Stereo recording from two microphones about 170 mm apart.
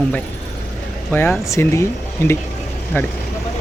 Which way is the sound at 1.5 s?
15° left (ahead or behind).